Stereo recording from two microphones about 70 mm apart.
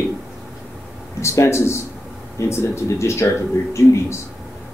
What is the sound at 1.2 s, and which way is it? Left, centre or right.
A man's voice, left.